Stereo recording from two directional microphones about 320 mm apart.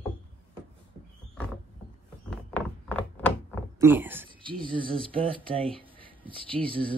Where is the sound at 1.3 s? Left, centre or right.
Centre.